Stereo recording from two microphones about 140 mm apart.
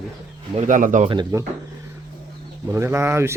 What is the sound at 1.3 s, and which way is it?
Speech, 20° right (ahead or behind).